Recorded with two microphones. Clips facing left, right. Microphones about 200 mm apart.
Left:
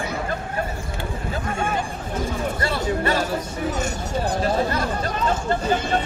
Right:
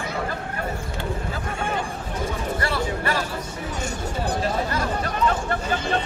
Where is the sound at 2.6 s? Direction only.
25° left (ahead or behind).